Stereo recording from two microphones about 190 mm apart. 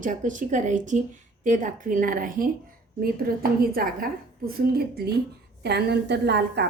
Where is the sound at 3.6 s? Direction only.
50° right (ahead or behind).